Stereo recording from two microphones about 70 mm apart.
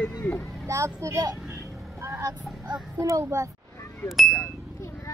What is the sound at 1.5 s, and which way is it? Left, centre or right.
Vehicle, right.